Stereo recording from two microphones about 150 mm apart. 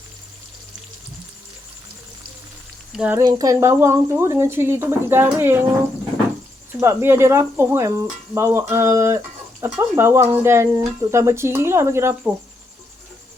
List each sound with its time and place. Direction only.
2.9 s speech: 5° right (ahead or behind)
3.2 s speech: 25° right (ahead or behind)
6.7 s speech: 15° right (ahead or behind)